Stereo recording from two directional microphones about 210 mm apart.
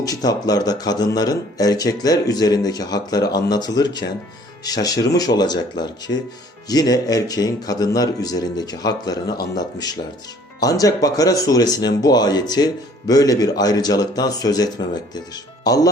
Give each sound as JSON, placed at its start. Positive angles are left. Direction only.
{"t": 0.0, "sound": "speech", "side_deg": 15}